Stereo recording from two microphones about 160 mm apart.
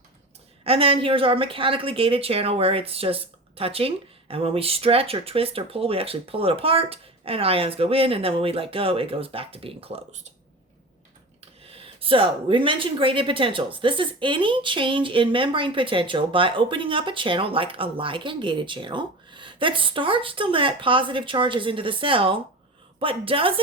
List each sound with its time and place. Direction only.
0.6 s speech: 35° right (ahead or behind)
11.7 s speech: 35° right (ahead or behind)